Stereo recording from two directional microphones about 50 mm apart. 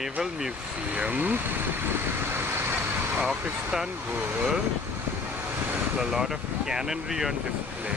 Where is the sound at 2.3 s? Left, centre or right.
Right.